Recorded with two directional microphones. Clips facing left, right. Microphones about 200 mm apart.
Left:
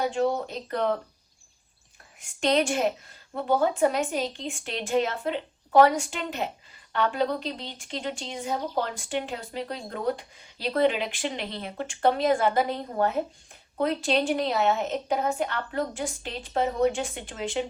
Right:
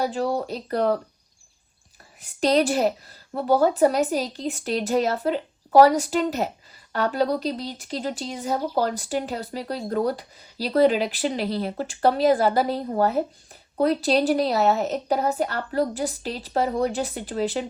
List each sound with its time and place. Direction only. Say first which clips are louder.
0.0 s speech: right 1 dB; 35° right (ahead or behind)
2.2 s speech: right 4 dB; 35° right (ahead or behind)